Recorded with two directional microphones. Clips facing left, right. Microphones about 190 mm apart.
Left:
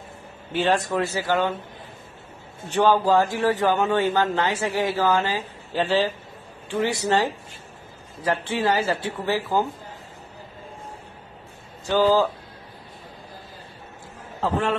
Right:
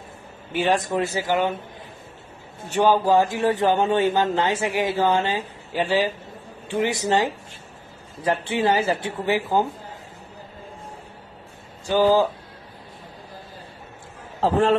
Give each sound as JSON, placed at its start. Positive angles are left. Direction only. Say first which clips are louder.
{"t": 0.5, "sound": "speech", "louder": "even", "side_deg": -15}
{"t": 2.7, "sound": "speech", "louder": "right 1 dB", "side_deg": -15}
{"t": 5.7, "sound": "speech", "louder": "even", "side_deg": -15}
{"t": 11.8, "sound": "speech", "louder": "right 1 dB", "side_deg": -15}
{"t": 14.4, "sound": "a man's voice", "louder": "right 5 dB", "side_deg": -40}